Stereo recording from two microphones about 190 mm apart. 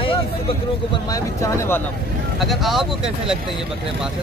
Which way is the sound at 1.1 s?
15° left (ahead or behind).